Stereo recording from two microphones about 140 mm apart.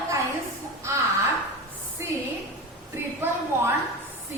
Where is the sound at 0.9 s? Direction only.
20° right (ahead or behind).